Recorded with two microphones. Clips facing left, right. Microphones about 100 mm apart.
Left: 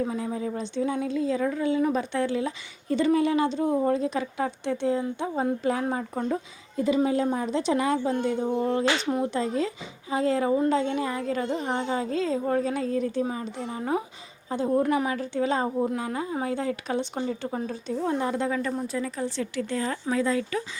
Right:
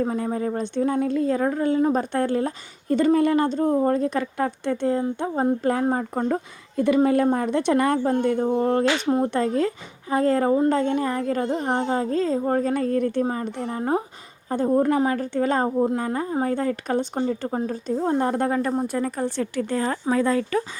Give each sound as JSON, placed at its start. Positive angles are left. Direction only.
{"t": 0.0, "sound": "speech", "side_deg": -45}
{"t": 6.7, "sound": "a woman's voice", "side_deg": -60}
{"t": 14.8, "sound": "speech", "side_deg": -40}